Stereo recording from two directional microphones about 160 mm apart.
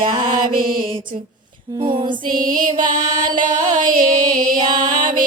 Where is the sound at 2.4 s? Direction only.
60° right (ahead or behind).